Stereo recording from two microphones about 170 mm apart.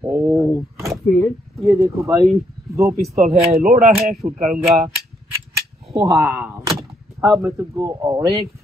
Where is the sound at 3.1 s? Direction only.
40° right (ahead or behind).